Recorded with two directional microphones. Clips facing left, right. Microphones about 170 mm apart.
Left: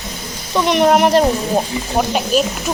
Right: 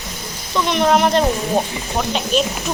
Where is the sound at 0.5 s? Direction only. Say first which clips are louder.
Left 3 dB; 15° left (ahead or behind).